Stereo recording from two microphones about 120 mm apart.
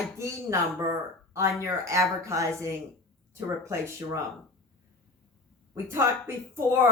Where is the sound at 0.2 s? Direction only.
25° right (ahead or behind).